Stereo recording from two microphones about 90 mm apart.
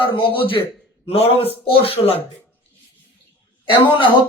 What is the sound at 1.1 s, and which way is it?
A man's voice, 90° left.